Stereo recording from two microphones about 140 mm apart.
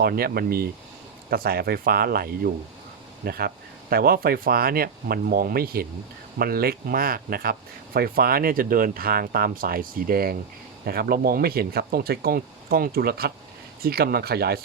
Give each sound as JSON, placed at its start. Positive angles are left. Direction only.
{"t": 0.0, "sound": "speech", "side_deg": -90}